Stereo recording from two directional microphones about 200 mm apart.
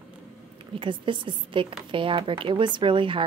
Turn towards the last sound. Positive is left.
turn(degrees=-25)  # may be behind; listen again after turning